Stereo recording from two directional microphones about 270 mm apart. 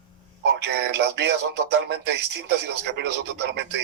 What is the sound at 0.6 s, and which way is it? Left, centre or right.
Speech, right.